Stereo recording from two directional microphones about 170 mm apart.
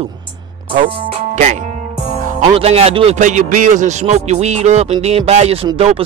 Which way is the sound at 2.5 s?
35° right (ahead or behind).